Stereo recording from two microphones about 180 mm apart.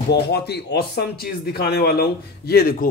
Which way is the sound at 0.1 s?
65° left (ahead or behind).